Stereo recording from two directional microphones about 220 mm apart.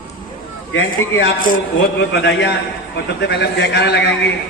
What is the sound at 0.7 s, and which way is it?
A man's voice, 55° left (ahead or behind).